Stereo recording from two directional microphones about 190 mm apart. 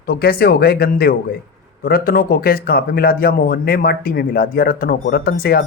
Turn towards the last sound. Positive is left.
turn(degrees=50)  # may be behind; listen again after turning